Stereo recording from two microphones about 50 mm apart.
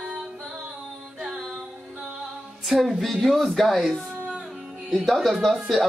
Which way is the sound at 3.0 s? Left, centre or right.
Centre.